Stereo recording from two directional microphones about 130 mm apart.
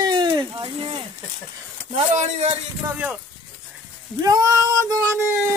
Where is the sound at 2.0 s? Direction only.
50° right (ahead or behind).